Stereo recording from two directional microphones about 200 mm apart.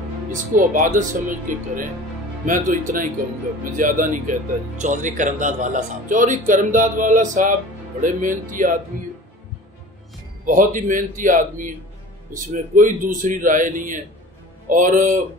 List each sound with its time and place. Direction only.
0.3 s speech: 40° right (ahead or behind)
2.4 s speech: 40° right (ahead or behind)
10.4 s speech: 40° right (ahead or behind)